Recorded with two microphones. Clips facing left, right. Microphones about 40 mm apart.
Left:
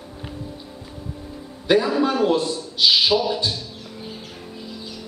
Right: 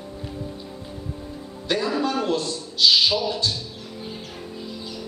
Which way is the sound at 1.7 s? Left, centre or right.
Centre.